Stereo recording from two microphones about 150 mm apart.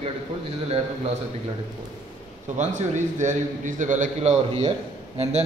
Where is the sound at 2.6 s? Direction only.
50° right (ahead or behind).